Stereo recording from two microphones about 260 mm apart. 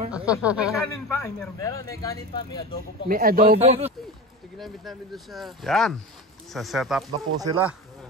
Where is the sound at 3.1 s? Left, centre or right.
Right.